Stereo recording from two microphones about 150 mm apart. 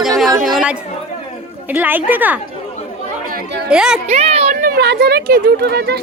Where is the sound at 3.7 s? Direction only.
5° right (ahead or behind).